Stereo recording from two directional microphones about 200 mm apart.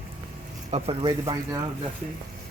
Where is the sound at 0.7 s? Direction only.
30° right (ahead or behind).